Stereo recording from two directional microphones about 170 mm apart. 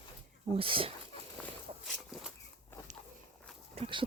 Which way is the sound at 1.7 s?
40° right (ahead or behind).